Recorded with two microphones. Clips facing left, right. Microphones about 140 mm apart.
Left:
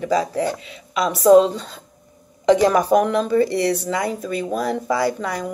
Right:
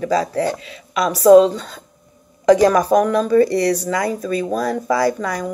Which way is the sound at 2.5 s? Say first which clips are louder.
Right 2 dB; 25° left (ahead or behind).